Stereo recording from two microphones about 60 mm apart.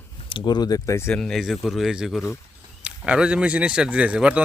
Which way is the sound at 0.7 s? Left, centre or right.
Left.